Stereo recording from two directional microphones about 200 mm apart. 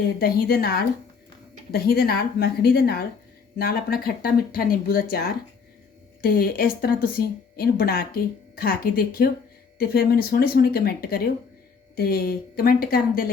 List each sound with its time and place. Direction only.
0.2 s a woman's voice: 50° left (ahead or behind)